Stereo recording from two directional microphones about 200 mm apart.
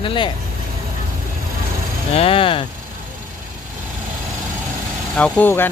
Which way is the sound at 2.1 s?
30° left (ahead or behind).